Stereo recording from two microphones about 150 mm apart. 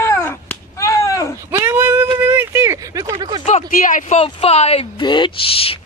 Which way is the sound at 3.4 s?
60° left (ahead or behind).